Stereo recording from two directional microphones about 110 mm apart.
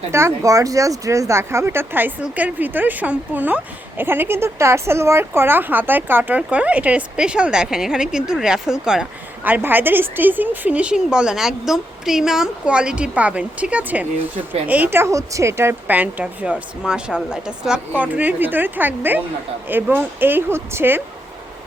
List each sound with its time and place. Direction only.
0.1 s speech: 25° right (ahead or behind); by 9.0 s 5° right (ahead or behind)
9.4 s speech: 15° right (ahead or behind)